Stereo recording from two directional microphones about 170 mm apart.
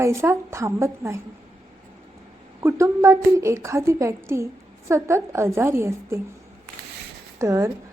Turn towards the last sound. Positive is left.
turn(degrees=-15)  # may be behind; listen again after turning